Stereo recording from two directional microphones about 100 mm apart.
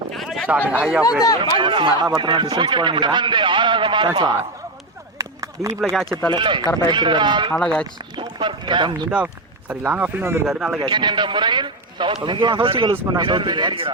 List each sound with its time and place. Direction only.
0.1 s a sound: centre (ahead or behind)
0.7 s speech: 10° right (ahead or behind)
1.5 s a man's voice: 55° right (ahead or behind)
5.1 s a sound: 35° right (ahead or behind)
5.8 s speech: centre (ahead or behind)
6.3 s a man's voice: 50° right (ahead or behind)
7.6 s speech: 10° left (ahead or behind)
8.2 s clip-clop: 50° right (ahead or behind)
9.0 s speech: 15° right (ahead or behind)
10.4 s speech: 5° right (ahead or behind)
10.8 s a man's voice: 50° right (ahead or behind)
13.1 s a man's voice: 50° right (ahead or behind)